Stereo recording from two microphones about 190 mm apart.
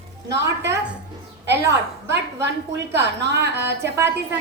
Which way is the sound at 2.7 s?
65° right (ahead or behind).